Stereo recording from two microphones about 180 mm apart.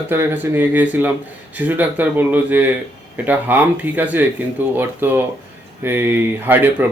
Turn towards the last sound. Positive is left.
turn(degrees=-10)  # may be behind; listen again after turning